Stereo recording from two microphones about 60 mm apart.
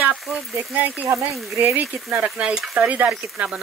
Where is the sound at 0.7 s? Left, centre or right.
Right.